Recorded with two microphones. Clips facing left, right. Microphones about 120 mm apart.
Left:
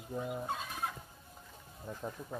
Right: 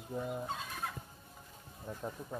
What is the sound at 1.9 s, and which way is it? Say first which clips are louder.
Speech: even; centre (ahead or behind).